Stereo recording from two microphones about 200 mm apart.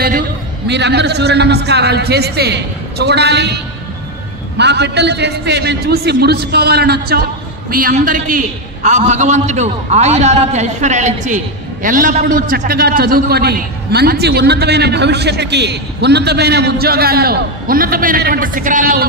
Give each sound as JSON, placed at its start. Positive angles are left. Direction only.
{"t": 0.7, "sound": "a man's voice", "side_deg": -55}
{"t": 4.6, "sound": "a man's voice", "side_deg": -55}